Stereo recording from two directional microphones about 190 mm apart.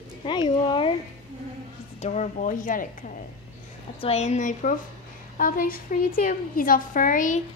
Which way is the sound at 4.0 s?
35° left (ahead or behind).